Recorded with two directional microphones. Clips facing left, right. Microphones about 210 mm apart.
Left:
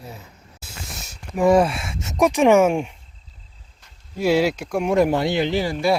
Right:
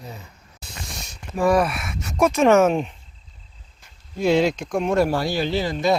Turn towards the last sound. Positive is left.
turn(degrees=10)  # may be behind; listen again after turning